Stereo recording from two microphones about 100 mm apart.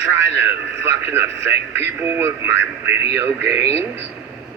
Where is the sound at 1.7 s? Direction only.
20° right (ahead or behind).